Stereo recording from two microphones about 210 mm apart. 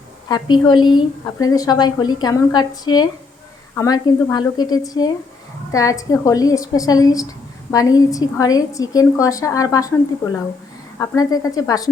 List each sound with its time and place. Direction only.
0.3 s a woman's voice: 20° left (ahead or behind)
11.0 s a woman's voice: 15° left (ahead or behind)